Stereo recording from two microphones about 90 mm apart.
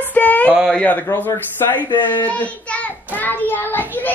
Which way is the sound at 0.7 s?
20° left (ahead or behind).